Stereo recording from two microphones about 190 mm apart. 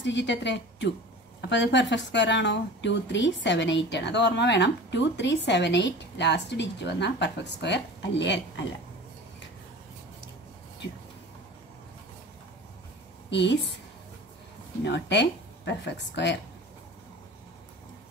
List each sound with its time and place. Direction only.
0.0 s a woman's voice: 70° left (ahead or behind)
13.3 s a woman's voice: 65° left (ahead or behind)
14.9 s a woman's voice: 65° left (ahead or behind)